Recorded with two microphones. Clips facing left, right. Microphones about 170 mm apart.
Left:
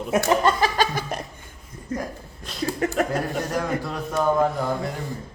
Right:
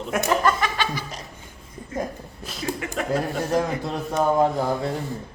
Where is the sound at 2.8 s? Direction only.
40° left (ahead or behind).